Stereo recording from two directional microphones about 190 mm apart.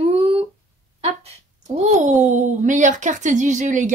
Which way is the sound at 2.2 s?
40° right (ahead or behind).